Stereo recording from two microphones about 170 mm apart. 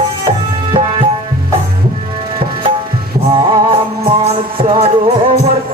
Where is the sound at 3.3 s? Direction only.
30° right (ahead or behind).